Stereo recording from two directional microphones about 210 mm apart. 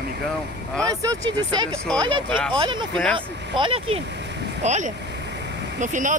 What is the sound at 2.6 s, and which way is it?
Speech, 20° right (ahead or behind).